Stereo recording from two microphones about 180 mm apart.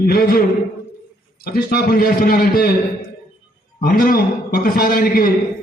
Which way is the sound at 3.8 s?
55° left (ahead or behind).